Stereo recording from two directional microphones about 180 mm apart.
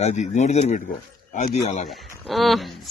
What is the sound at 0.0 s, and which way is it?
A man's voice, 40° left (ahead or behind).